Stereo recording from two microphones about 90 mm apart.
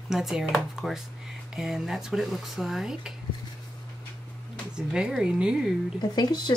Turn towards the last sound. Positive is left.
turn(degrees=50)  # may be behind; listen again after turning